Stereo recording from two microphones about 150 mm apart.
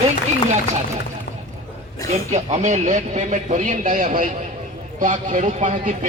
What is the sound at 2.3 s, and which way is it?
Speech, 50° right (ahead or behind).